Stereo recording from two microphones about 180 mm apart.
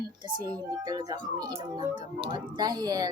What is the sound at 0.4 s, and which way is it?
Speech, 20° right (ahead or behind).